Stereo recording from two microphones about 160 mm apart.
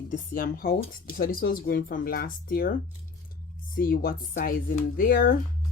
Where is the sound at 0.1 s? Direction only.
60° left (ahead or behind).